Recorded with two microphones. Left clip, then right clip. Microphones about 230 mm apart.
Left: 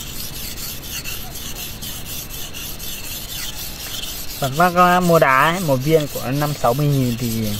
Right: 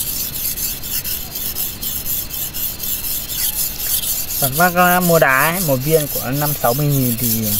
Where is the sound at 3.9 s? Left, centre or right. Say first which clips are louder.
Right 4 dB; centre.